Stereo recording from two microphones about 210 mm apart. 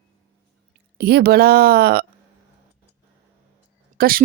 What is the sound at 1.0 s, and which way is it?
Speech, 50° right (ahead or behind).